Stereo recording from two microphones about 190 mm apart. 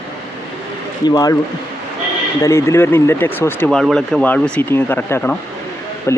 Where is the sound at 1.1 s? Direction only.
20° left (ahead or behind).